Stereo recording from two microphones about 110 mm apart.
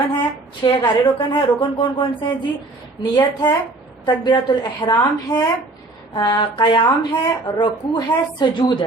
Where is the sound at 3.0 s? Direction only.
45° left (ahead or behind).